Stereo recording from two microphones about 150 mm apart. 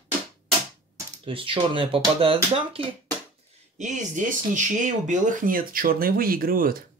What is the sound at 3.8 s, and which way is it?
Speech, 55° right (ahead or behind).